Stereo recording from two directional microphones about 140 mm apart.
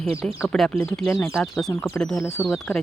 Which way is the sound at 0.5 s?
Centre (ahead or behind).